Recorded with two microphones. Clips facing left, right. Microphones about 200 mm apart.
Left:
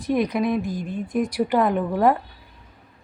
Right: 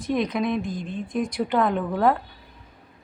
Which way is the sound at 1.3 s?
10° left (ahead or behind).